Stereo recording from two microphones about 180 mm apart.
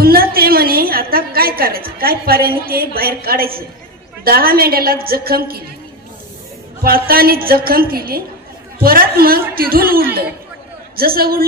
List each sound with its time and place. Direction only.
0.0 s a woman's voice: 55° right (ahead or behind)
6.8 s a man's voice: 55° right (ahead or behind)